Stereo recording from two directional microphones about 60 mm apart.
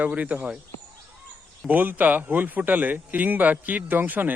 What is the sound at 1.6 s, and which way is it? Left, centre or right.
Speech, right.